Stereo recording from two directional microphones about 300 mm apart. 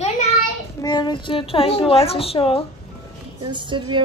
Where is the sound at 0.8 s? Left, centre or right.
Centre.